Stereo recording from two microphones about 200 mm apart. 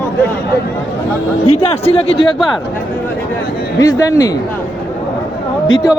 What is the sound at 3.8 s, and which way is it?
Speech, 15° left (ahead or behind).